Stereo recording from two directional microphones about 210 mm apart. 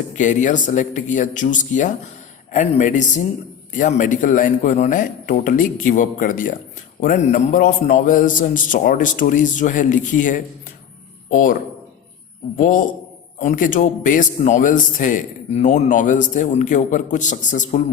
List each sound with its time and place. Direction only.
0.1 s a man's voice: 35° left (ahead or behind)
12.5 s a man's voice: 40° left (ahead or behind)